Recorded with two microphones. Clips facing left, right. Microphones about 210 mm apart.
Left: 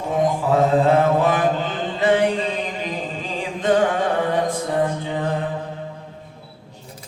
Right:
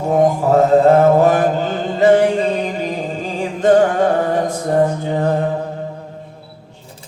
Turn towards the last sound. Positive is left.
turn(degrees=-40)  # may be behind; listen again after turning